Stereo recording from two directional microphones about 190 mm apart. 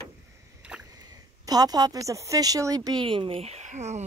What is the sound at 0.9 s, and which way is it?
Speech, 20° right (ahead or behind).